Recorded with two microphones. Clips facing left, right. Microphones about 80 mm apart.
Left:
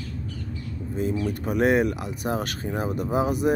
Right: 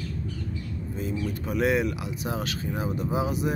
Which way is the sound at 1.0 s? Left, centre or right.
Left.